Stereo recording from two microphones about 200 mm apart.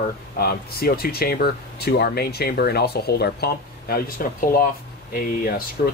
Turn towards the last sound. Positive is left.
turn(degrees=50)  # may be behind; listen again after turning